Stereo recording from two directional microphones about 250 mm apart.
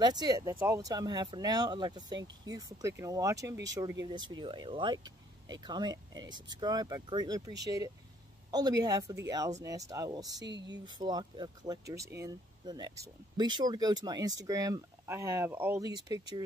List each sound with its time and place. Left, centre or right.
0.0 s speech: centre